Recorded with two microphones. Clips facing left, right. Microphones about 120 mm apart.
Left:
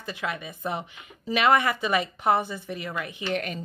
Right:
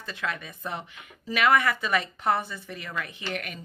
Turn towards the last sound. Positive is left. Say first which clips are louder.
# left 6 dB
turn(degrees=30)  # may be behind; listen again after turning